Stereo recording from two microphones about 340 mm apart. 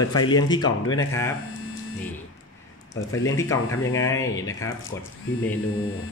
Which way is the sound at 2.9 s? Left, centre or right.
Centre.